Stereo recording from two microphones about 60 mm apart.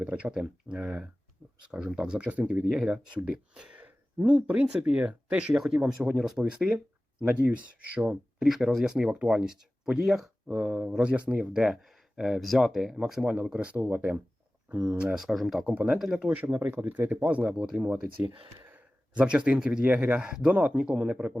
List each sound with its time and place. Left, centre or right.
0.0 s speech: centre
0.8 s speech: right
1.7 s speech: centre
2.7 s speech: centre
3.8 s speech: right; by 6.4 s centre
6.4 s speech: right
8.4 s speech: centre
10.5 s speech: right
11.3 s speech: right
11.5 s speech: centre
13.2 s speech: right
15.1 s speech: centre
15.6 s speech: right
19.2 s speech: centre